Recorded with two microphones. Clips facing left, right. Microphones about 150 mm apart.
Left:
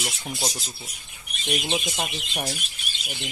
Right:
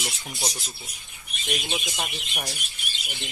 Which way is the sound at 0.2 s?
25° left (ahead or behind).